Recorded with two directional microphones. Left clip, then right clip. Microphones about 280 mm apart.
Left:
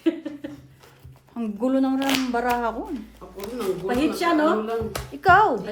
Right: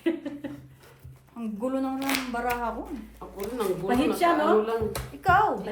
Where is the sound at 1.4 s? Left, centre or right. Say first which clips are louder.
Left 6 dB; left.